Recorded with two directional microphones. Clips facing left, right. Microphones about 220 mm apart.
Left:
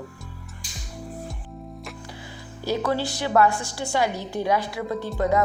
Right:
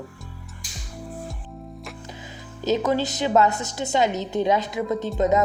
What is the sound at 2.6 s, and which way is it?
A woman's voice, 20° right (ahead or behind).